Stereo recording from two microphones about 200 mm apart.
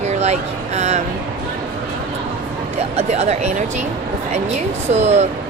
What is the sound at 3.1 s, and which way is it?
Speech, 35° right (ahead or behind).